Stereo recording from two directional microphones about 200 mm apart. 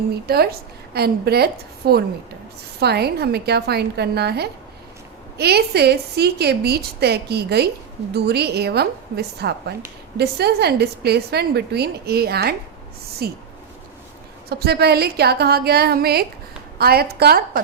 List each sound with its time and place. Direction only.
0.1 s a woman's voice: 50° right (ahead or behind)
14.5 s a woman's voice: 55° right (ahead or behind)